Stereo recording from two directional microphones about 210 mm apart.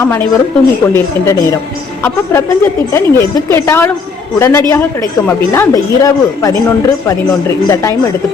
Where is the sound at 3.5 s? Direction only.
10° left (ahead or behind).